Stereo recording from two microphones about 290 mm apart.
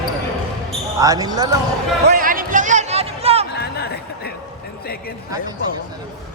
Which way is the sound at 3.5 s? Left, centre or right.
Left.